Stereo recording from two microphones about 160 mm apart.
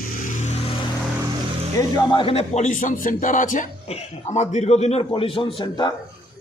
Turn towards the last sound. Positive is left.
turn(degrees=30)  # may be behind; listen again after turning